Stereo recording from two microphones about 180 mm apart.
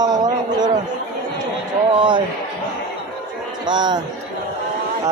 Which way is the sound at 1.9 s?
25° right (ahead or behind).